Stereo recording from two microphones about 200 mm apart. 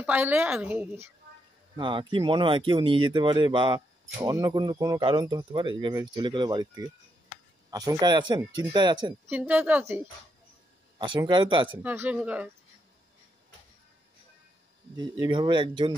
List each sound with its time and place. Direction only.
0.0 s a woman's voice: 10° right (ahead or behind)
1.8 s speech: 25° right (ahead or behind)
9.3 s a woman's voice: 10° right (ahead or behind)
11.0 s speech: 20° right (ahead or behind)
11.7 s a woman's voice: 10° right (ahead or behind)
15.2 s speech: 25° right (ahead or behind)